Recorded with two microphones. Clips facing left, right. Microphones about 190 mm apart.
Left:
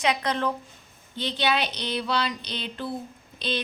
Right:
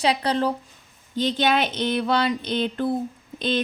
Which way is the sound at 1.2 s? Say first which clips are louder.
Right 5 dB; 45° right (ahead or behind).